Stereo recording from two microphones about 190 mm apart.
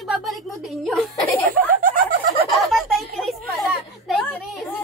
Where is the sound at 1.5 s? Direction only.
45° right (ahead or behind).